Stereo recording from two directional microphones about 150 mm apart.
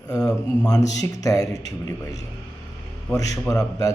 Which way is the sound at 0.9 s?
25° left (ahead or behind).